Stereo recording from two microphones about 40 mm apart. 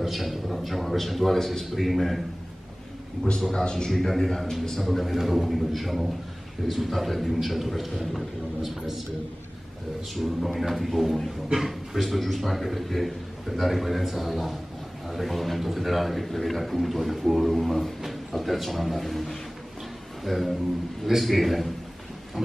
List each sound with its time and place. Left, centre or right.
0.0 s a man's voice: centre
3.3 s a man's voice: centre
4.1 s a man's voice: centre
10.1 s a man's voice: centre